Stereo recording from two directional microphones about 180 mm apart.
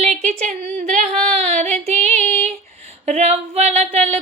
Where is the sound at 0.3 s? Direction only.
40° right (ahead or behind).